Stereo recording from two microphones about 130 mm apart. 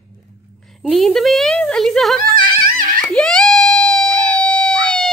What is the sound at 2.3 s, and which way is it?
Music, 90° right.